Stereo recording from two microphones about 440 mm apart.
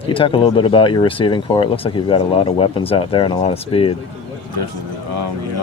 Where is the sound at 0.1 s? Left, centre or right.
Centre.